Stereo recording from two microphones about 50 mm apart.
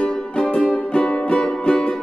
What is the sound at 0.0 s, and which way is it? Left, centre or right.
Music, centre.